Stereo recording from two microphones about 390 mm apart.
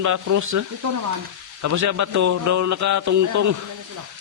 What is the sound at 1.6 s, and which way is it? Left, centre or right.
A man's voice, right.